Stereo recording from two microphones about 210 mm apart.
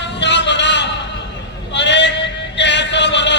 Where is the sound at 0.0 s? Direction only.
55° left (ahead or behind).